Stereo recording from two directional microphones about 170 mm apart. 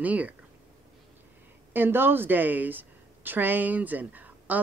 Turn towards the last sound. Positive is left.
turn(degrees=-10)  # may be behind; listen again after turning